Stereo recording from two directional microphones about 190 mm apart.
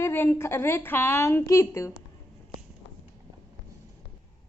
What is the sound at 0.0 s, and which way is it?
A woman's voice, 10° left (ahead or behind).